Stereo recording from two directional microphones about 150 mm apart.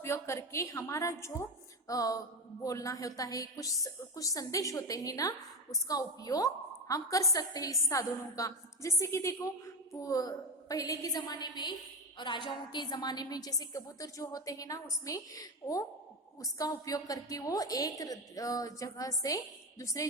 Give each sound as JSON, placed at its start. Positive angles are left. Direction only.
{"t": 0.0, "sound": "a woman's voice", "side_deg": 15}